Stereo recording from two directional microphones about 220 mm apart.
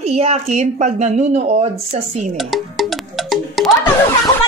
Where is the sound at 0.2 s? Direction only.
30° right (ahead or behind).